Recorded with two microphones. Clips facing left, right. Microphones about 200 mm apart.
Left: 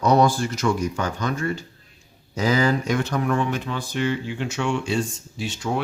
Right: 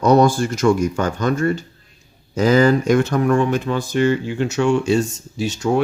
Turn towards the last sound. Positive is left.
turn(degrees=-40)  # may be behind; listen again after turning